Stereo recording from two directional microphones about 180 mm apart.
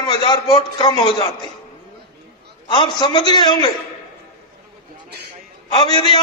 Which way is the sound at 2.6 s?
25° left (ahead or behind).